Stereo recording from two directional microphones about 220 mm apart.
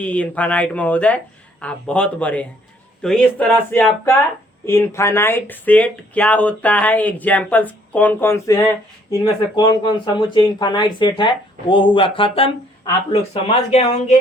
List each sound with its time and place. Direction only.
0.0 s speech: 5° left (ahead or behind); by 14.2 s 30° left (ahead or behind)